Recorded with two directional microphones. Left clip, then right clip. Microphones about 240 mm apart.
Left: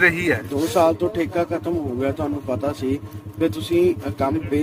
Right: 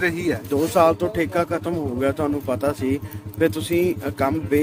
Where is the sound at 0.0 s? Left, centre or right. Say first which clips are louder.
Left 5 dB; centre.